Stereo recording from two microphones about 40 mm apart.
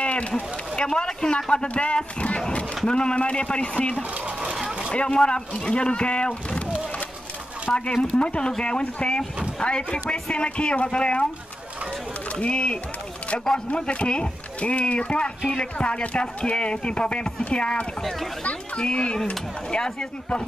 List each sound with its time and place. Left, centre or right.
0.0 s run: left
0.3 s speech: left
4.5 s sewing machine: centre
4.9 s speech: left
7.7 s speech: left
12.3 s speech: left